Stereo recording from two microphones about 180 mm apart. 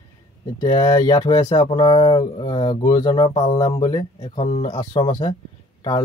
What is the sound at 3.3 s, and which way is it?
Speech, 40° left (ahead or behind).